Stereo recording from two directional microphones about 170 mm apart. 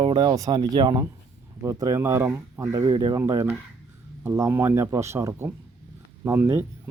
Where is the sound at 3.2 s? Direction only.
15° right (ahead or behind).